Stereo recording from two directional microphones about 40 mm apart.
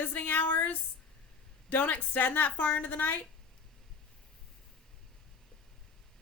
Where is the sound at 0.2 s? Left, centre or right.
Left.